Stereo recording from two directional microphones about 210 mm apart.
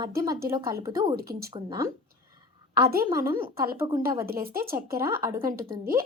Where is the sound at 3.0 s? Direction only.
15° right (ahead or behind).